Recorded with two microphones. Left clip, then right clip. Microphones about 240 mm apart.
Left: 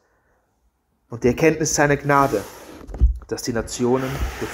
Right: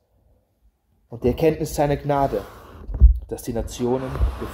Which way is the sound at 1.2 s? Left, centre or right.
Centre.